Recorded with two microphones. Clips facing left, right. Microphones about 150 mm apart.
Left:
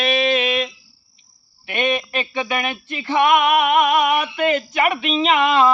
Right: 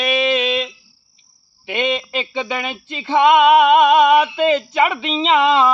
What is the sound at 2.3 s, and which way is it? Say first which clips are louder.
Speech: left 2 dB; 20° right (ahead or behind).